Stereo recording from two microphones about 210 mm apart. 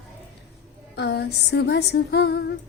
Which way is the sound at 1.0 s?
55° left (ahead or behind).